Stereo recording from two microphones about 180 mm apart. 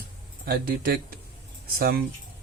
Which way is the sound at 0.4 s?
55° right (ahead or behind).